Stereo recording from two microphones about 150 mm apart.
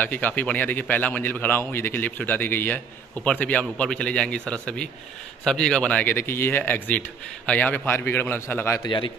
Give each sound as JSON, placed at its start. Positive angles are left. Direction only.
{"t": 0.0, "sound": "speech", "side_deg": 10}
{"t": 8.8, "sound": "a man's voice", "side_deg": 30}